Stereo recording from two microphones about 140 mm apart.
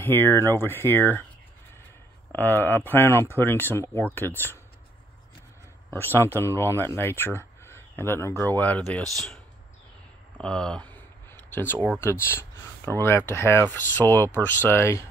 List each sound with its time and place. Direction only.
0.0 s speech: 15° left (ahead or behind)
2.3 s speech: 15° left (ahead or behind)
5.9 s speech: 15° left (ahead or behind)
10.4 s a sound: 5° left (ahead or behind)
12.0 s speech: 20° left (ahead or behind)